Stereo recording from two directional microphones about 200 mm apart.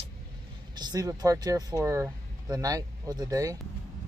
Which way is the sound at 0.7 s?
20° right (ahead or behind).